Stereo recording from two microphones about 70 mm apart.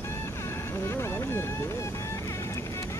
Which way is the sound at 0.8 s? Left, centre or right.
Left.